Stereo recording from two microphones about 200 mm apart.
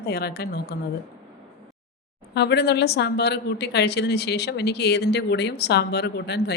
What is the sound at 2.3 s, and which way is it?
Speech, 55° left (ahead or behind).